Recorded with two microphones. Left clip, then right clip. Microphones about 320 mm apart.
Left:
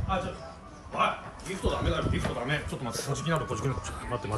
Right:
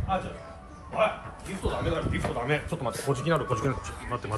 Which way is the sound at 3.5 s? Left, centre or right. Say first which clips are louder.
Right 4 dB; centre.